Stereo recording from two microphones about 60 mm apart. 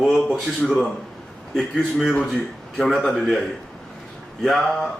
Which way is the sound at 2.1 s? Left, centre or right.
Centre.